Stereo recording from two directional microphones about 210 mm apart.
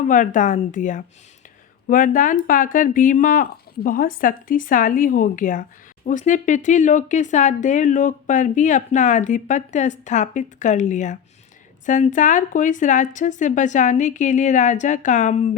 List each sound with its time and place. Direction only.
0.1 s speech: 40° left (ahead or behind)